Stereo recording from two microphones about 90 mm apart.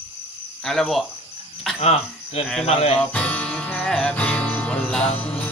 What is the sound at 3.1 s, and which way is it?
Music, 15° left (ahead or behind).